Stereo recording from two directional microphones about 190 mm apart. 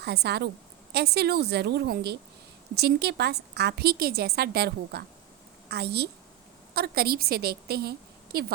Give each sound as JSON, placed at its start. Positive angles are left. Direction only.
{"t": 0.0, "sound": "a woman's voice", "side_deg": -60}